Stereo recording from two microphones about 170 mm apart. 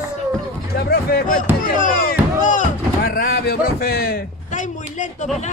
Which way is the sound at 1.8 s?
50° left (ahead or behind).